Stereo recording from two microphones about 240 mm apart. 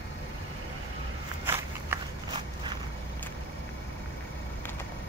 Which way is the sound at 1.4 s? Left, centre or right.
Centre.